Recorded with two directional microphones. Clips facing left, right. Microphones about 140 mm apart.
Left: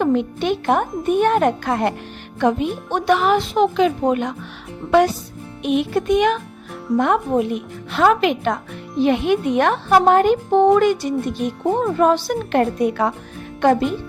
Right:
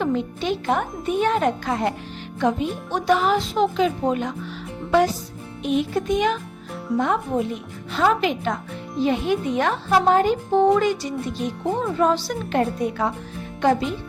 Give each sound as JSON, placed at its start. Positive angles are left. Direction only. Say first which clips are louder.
{"t": 0.0, "sound": "speech", "louder": "left 5 dB", "side_deg": 60}
{"t": 13.6, "sound": "speech", "louder": "left 4 dB", "side_deg": 55}